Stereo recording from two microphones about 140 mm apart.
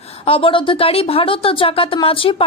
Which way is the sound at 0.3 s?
40° left (ahead or behind).